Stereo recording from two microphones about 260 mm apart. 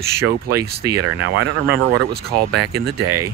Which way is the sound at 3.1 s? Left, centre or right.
Centre.